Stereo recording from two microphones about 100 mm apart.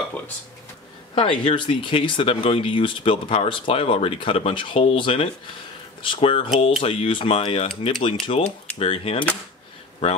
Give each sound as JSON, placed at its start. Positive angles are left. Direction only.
{"t": 1.1, "sound": "speech", "side_deg": 60}